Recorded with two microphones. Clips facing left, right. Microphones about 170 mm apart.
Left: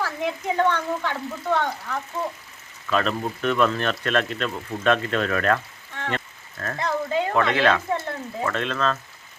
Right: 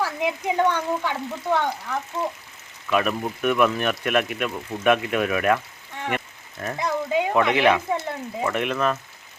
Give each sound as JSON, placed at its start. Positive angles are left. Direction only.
{"t": 0.0, "sound": "a woman's voice", "side_deg": -10}
{"t": 2.2, "sound": "speech", "side_deg": -15}